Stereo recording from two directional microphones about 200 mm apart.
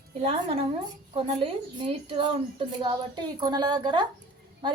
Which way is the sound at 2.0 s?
25° right (ahead or behind).